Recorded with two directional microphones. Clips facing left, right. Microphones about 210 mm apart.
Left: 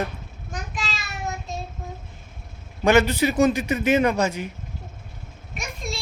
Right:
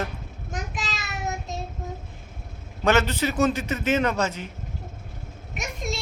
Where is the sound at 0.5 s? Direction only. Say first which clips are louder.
Even; 20° right (ahead or behind).